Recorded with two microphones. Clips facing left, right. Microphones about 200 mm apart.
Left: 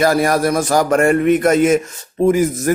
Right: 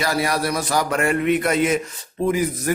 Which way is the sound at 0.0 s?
50° left (ahead or behind).